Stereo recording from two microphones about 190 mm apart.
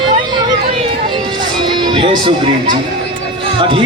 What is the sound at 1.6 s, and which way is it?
Speech, 25° right (ahead or behind).